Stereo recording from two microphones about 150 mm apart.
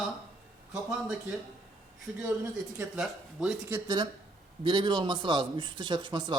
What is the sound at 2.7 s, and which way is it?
Speech, 10° right (ahead or behind).